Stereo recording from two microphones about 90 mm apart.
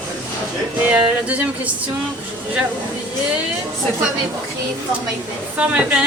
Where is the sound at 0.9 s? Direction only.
15° right (ahead or behind).